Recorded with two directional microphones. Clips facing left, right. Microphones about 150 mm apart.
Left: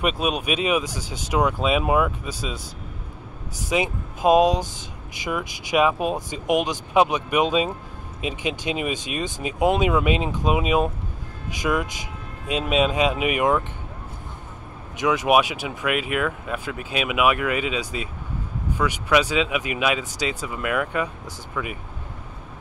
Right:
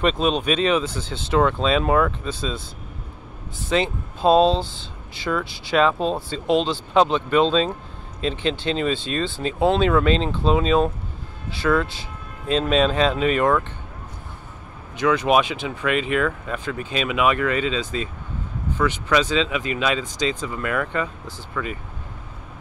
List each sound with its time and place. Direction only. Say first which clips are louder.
0.0 s speech: right 3 dB; 10° left (ahead or behind)
3.6 s speech: right 2 dB; 10° left (ahead or behind)
15.0 s speech: right 1 dB; 15° left (ahead or behind)